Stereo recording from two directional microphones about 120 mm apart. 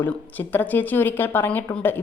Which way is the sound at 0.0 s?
15° left (ahead or behind).